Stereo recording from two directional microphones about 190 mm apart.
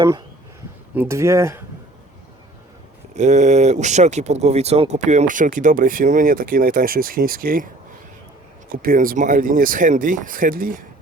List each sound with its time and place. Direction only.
0.9 s speech: 15° right (ahead or behind)
3.2 s speech: 40° right (ahead or behind)
8.7 s speech: 50° right (ahead or behind)